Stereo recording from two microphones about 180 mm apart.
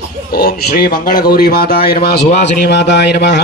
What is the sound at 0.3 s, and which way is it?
Mantra, 55° left (ahead or behind).